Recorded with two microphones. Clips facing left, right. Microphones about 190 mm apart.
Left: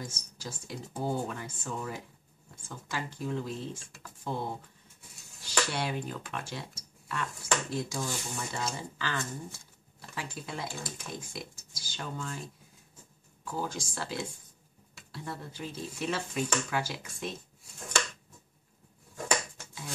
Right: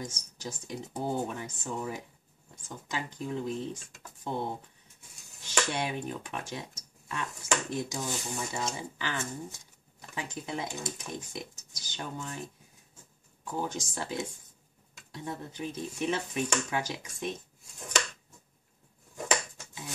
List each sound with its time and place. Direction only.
0.0 s speech: 20° right (ahead or behind)
13.5 s speech: 20° right (ahead or behind)
19.1 s a sound: 20° right (ahead or behind)